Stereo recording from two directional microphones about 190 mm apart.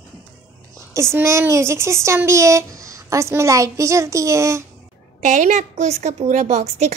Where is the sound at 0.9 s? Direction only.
15° right (ahead or behind).